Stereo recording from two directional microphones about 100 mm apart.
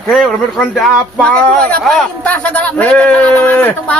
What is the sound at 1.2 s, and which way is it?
Speech, 10° left (ahead or behind).